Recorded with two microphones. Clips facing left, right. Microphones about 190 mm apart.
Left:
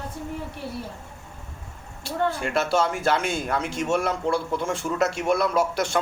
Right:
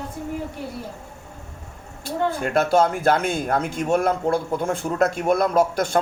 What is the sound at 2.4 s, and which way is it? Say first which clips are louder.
A man's voice: right 7 dB; 50° right (ahead or behind).